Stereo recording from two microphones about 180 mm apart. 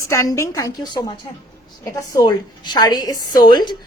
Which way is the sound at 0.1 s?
15° left (ahead or behind).